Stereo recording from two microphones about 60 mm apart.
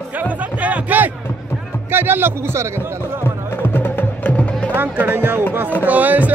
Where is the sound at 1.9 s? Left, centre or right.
Right.